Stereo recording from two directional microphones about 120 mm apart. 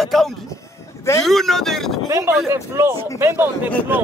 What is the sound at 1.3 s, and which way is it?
Speech, 5° left (ahead or behind).